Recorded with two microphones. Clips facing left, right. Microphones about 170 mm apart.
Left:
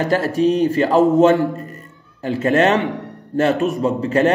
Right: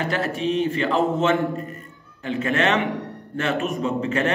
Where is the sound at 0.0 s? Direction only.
40° left (ahead or behind).